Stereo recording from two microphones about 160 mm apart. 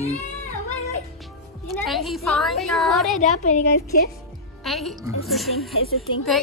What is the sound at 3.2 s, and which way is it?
Speech, 50° left (ahead or behind).